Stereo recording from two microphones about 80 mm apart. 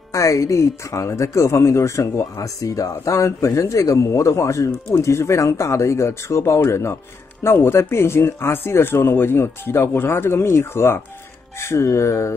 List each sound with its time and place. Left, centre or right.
0.1 s speech: left